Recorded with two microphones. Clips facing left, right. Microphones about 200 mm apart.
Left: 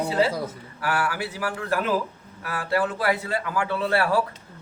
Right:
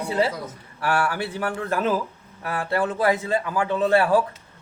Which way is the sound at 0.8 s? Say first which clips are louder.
Right 3 dB; 25° right (ahead or behind).